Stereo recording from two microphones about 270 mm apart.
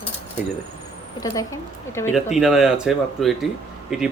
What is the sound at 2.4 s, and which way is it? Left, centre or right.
Speech, centre.